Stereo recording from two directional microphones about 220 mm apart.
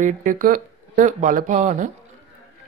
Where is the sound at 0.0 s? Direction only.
35° right (ahead or behind).